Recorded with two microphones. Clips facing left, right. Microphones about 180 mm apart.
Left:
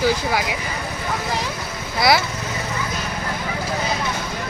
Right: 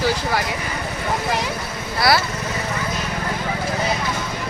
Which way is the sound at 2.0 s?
15° left (ahead or behind).